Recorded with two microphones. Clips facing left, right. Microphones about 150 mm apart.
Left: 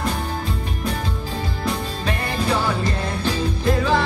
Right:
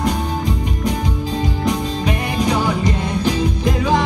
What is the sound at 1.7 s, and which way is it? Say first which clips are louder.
Music: right 4 dB; 15° right (ahead or behind).